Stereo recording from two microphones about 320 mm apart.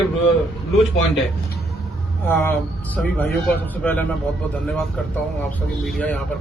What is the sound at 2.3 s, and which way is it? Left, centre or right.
A man's voice, centre.